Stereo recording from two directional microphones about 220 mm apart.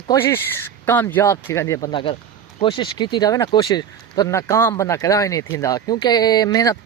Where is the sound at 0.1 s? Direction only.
10° left (ahead or behind).